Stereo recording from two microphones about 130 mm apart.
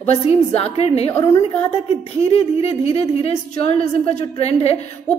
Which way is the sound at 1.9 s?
45° left (ahead or behind).